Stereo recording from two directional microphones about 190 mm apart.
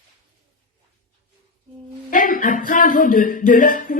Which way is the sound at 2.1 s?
45° left (ahead or behind).